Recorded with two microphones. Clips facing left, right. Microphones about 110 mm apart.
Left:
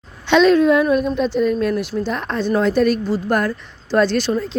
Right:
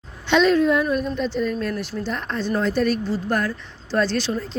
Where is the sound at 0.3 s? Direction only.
90° left.